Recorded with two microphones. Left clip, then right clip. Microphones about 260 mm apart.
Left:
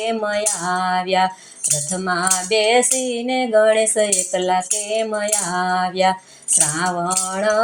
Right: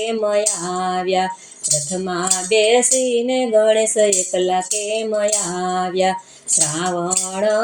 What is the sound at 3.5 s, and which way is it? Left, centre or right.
Speech, left.